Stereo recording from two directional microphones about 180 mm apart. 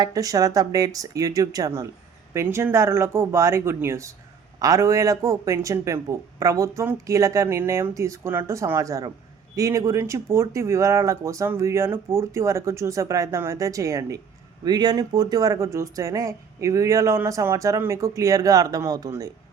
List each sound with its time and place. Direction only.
0.0 s speech: 20° right (ahead or behind)